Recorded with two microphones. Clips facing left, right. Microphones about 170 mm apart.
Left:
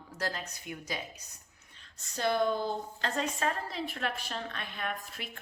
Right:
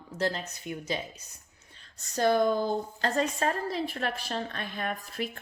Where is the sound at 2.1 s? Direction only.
40° right (ahead or behind).